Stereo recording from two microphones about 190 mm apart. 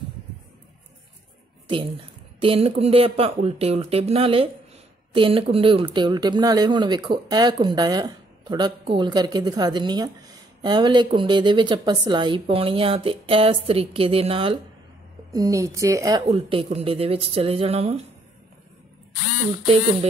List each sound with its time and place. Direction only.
2.4 s a woman's voice: 30° right (ahead or behind)
15.3 s a woman's voice: 15° right (ahead or behind)